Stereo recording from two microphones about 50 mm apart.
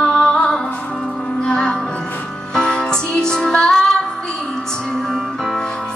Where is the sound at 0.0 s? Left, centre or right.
Centre.